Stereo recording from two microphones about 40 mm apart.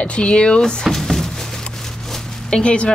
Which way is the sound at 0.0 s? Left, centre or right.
Left.